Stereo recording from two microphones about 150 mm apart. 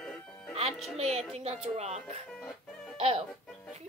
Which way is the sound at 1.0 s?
45° right (ahead or behind).